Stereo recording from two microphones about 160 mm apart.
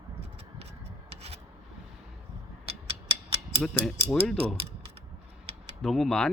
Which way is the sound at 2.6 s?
40° right (ahead or behind).